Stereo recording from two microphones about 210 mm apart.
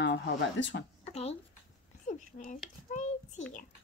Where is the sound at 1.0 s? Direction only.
30° left (ahead or behind).